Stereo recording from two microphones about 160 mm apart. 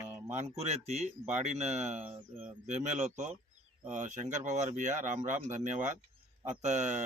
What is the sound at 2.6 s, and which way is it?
Speech, 45° right (ahead or behind).